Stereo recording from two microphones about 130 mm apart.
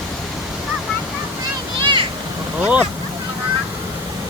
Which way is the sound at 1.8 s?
35° right (ahead or behind).